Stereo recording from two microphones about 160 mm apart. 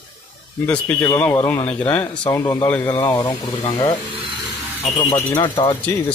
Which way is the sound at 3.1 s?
25° left (ahead or behind).